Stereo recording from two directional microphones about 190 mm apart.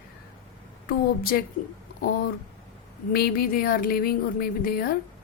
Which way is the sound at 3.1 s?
55° left (ahead or behind).